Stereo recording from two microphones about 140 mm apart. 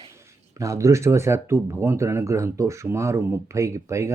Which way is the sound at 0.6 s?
20° right (ahead or behind).